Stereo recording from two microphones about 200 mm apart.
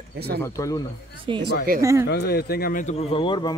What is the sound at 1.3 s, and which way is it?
Speech, 25° right (ahead or behind).